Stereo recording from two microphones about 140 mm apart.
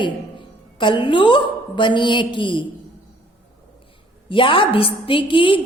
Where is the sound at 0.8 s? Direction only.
35° left (ahead or behind).